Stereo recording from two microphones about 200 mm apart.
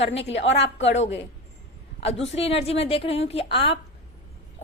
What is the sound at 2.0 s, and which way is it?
A woman's voice, 30° left (ahead or behind).